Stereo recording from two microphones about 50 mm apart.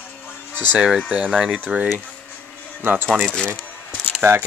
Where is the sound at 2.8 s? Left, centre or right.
Right.